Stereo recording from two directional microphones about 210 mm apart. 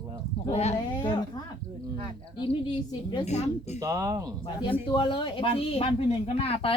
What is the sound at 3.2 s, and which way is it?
Speech, 30° left (ahead or behind).